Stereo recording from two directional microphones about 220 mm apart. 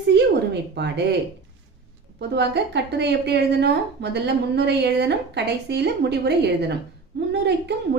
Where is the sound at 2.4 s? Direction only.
50° right (ahead or behind).